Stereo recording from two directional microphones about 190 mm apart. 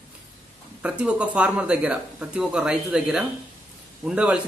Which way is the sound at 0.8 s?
5° right (ahead or behind).